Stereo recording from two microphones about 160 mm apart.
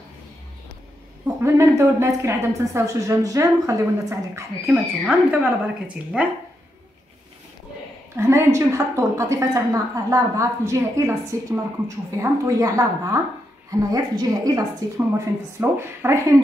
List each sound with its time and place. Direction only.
1.2 s a woman's voice: 20° right (ahead or behind)
8.2 s a woman's voice: 15° right (ahead or behind)